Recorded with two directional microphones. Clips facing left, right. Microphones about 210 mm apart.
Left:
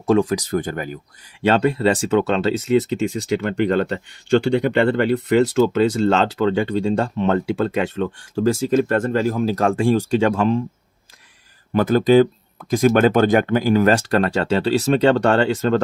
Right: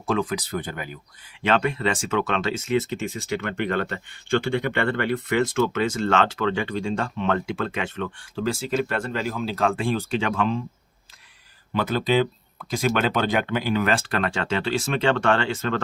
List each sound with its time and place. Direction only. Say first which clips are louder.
0.0 s speech: left 8 dB; 40° left (ahead or behind)
1.5 s speech: left 6 dB; 35° left (ahead or behind)
11.7 s speech: left 8 dB; 45° left (ahead or behind)